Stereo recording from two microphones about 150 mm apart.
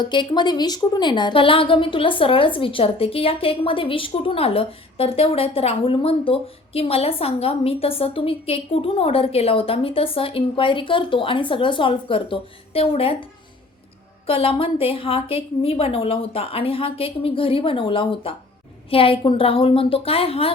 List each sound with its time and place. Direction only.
0.0 s a woman's voice: 30° left (ahead or behind)
14.3 s a woman's voice: 40° left (ahead or behind)